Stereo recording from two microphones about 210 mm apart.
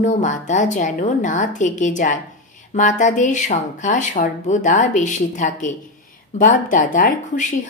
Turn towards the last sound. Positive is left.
turn(degrees=35)  # may be behind; listen again after turning